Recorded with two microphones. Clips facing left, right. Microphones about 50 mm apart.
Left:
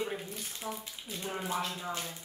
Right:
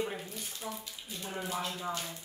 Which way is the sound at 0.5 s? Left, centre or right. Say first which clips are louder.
Left 2 dB; left.